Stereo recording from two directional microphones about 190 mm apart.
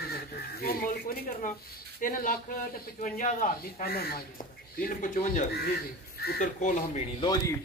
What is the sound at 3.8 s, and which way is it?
Speech, 55° left (ahead or behind).